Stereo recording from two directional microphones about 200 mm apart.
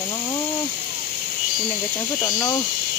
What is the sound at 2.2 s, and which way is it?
Speech, 15° left (ahead or behind).